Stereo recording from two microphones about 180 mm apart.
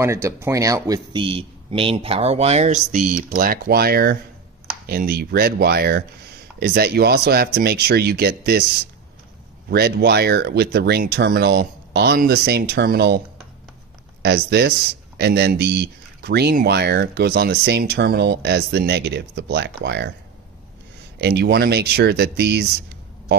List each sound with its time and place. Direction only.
0.0 s speech: 15° right (ahead or behind); by 8.6 s 60° right (ahead or behind)
9.7 s speech: 65° right (ahead or behind)
14.2 s speech: 65° right (ahead or behind)
21.2 s speech: 65° right (ahead or behind)